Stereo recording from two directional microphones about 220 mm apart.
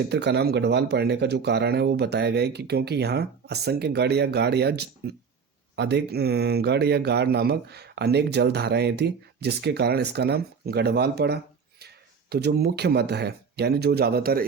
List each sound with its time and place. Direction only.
0.1 s speech: 50° right (ahead or behind)